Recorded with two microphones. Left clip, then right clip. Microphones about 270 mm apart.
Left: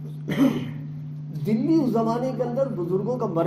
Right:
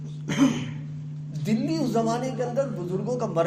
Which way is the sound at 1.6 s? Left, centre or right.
Right.